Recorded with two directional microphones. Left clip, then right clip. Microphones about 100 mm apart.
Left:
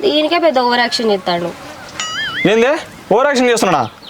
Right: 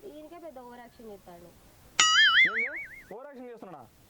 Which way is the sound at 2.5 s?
25° left (ahead or behind).